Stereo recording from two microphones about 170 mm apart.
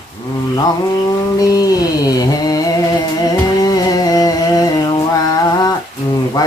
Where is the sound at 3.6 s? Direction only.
20° left (ahead or behind).